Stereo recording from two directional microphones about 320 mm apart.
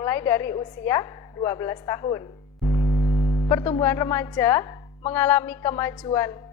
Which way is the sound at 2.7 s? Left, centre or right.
Left.